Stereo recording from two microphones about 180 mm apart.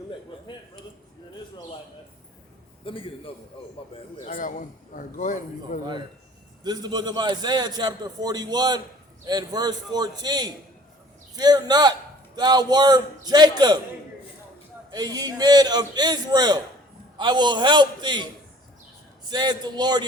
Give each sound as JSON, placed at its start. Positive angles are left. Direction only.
{"t": 2.8, "sound": "a man's voice", "side_deg": 30}
{"t": 4.3, "sound": "a man's voice", "side_deg": 50}
{"t": 6.6, "sound": "a man's voice", "side_deg": -25}
{"t": 14.8, "sound": "a man's voice", "side_deg": -20}
{"t": 19.3, "sound": "a man's voice", "side_deg": -25}